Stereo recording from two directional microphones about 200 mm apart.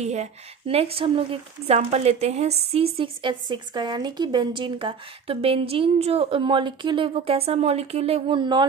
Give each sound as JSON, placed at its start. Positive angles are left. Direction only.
{"t": 0.0, "sound": "a woman's voice", "side_deg": -35}